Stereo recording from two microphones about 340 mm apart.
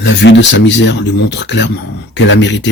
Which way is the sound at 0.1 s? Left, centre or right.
Left.